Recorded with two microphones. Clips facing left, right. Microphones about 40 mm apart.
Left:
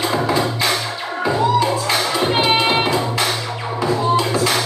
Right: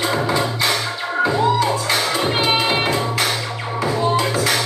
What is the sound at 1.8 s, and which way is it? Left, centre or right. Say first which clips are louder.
Music: left 1 dB; centre.